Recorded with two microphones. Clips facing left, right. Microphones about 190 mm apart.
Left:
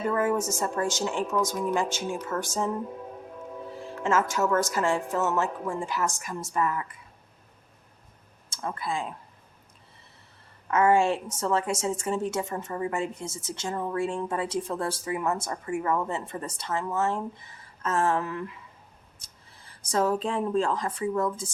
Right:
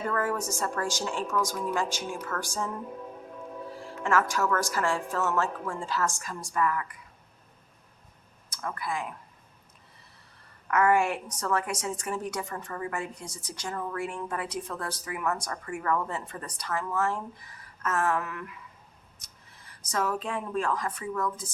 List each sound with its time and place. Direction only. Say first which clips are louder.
0.0 s a woman's voice: left 4 dB; 20° left (ahead or behind)
3.7 s a woman's voice: left 2 dB; 20° left (ahead or behind)
8.4 s speech: left 2 dB; 25° left (ahead or behind)
10.7 s a woman's voice: left 2 dB; 25° left (ahead or behind)